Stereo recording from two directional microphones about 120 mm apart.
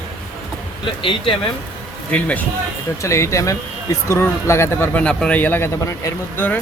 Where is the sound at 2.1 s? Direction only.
10° left (ahead or behind).